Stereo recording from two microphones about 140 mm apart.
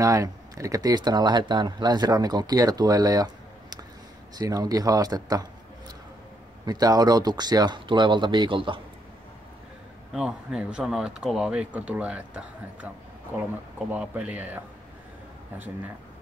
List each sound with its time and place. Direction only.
0.0 s speech: 25° right (ahead or behind)
4.4 s speech: 25° right (ahead or behind)
6.6 s speech: 30° right (ahead or behind)
10.1 s speech: 5° right (ahead or behind)
13.9 s speech: 10° right (ahead or behind)